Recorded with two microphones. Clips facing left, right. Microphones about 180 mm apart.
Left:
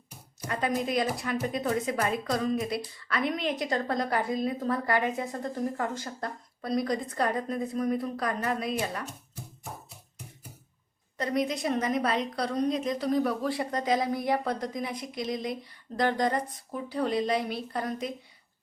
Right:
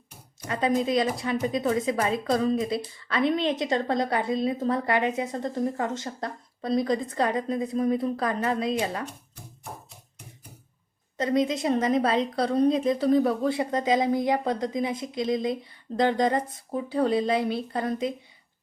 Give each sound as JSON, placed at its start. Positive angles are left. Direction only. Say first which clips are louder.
{"t": 0.4, "sound": "a woman's voice", "louder": "right 4 dB", "side_deg": -25}
{"t": 11.2, "sound": "a woman's voice", "louder": "right 4 dB", "side_deg": -25}